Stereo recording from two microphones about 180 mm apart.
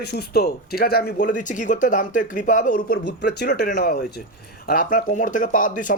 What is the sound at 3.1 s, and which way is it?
Speech, 65° left (ahead or behind).